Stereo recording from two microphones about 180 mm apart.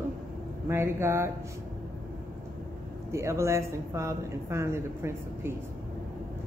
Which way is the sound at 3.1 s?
15° right (ahead or behind).